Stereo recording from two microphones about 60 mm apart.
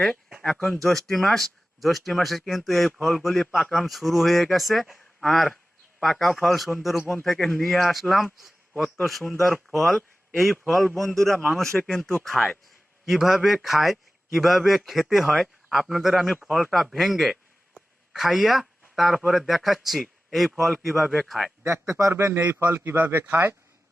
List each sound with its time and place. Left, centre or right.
0.8 s a man's voice: centre
21.6 s speech: right
22.1 s speech: right